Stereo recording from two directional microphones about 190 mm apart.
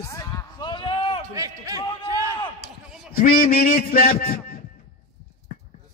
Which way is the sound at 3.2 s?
50° left (ahead or behind).